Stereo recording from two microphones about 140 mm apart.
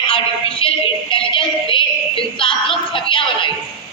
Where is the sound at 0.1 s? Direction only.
40° left (ahead or behind).